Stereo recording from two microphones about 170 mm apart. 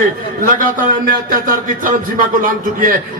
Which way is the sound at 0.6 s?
55° right (ahead or behind).